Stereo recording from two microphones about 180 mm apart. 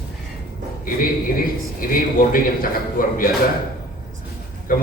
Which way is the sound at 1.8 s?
55° left (ahead or behind).